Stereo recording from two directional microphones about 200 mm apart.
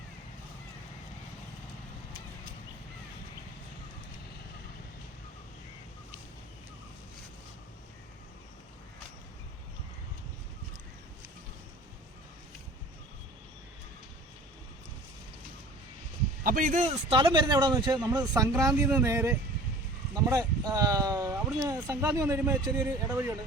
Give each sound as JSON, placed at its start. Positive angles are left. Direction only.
{"t": 16.4, "sound": "speech", "side_deg": -45}